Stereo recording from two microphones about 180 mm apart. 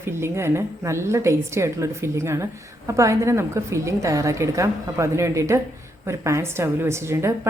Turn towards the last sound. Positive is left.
turn(degrees=-15)  # may be behind; listen again after turning